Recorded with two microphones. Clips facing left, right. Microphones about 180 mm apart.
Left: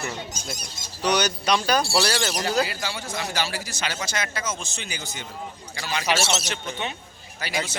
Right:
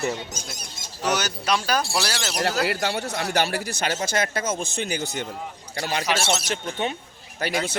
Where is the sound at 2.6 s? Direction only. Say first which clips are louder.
Right 7 dB; 65° right (ahead or behind); by 6.9 s 45° right (ahead or behind).